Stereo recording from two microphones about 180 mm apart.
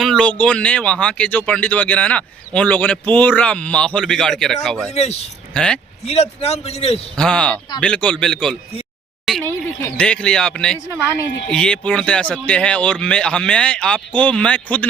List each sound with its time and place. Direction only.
0.0 s a man's voice: 5° left (ahead or behind)
6.1 s a man's voice: 35° left (ahead or behind)
7.2 s a man's voice: 5° left (ahead or behind)